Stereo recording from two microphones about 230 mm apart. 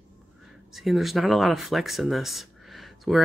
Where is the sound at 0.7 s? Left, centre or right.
Centre.